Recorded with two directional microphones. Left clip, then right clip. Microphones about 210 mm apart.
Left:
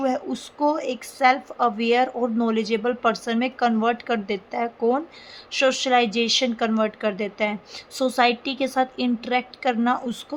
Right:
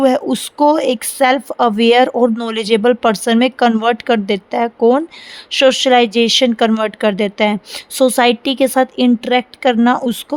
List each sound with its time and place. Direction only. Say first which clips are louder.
0.0 s speech: right 11 dB; 50° right (ahead or behind)